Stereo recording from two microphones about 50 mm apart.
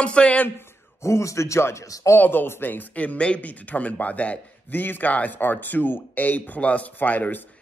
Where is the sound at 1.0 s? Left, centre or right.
Left.